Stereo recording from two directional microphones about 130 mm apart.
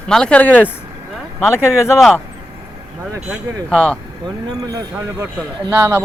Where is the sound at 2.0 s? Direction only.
5° left (ahead or behind).